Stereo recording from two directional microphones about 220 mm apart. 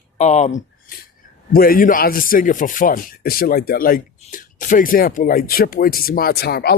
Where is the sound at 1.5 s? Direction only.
40° left (ahead or behind).